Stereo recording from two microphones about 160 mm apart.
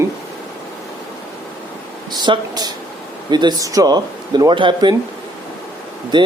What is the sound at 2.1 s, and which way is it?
Speech, 25° right (ahead or behind).